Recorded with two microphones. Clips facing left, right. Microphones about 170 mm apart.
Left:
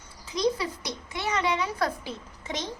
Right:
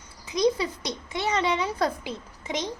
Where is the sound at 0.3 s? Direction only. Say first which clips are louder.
Right 3 dB; 20° right (ahead or behind).